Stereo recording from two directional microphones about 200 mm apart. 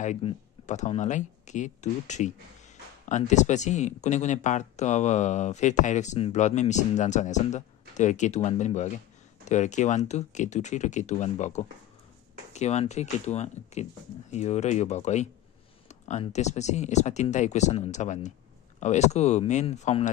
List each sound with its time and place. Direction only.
0.0 s speech: 30° left (ahead or behind)